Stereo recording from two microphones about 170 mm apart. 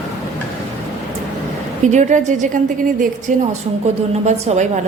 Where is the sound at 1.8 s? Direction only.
45° right (ahead or behind).